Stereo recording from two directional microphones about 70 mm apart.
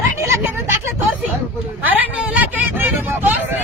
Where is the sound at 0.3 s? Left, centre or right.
Right.